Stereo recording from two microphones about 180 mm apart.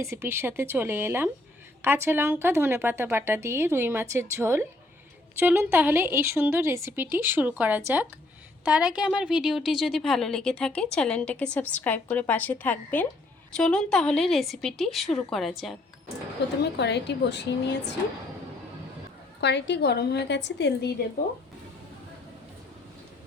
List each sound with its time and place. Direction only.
0.0 s a woman's voice: 15° right (ahead or behind)
16.4 s a woman's voice: 70° left (ahead or behind)
19.4 s a woman's voice: 70° left (ahead or behind)